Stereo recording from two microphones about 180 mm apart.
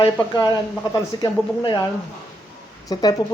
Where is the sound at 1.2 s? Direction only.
20° left (ahead or behind).